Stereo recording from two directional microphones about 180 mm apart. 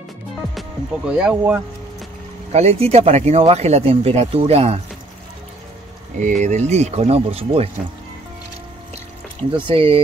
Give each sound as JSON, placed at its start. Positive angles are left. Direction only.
{"t": 0.6, "sound": "speech", "side_deg": -5}
{"t": 2.5, "sound": "speech", "side_deg": -35}
{"t": 6.1, "sound": "speech", "side_deg": -45}
{"t": 9.7, "sound": "speech", "side_deg": -30}